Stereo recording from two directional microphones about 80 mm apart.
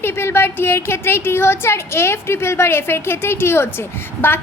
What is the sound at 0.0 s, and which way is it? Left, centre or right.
Speech, left.